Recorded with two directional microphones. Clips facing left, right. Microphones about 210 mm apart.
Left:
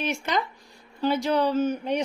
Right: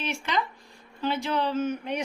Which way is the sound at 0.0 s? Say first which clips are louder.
Left 2 dB; 45° left (ahead or behind).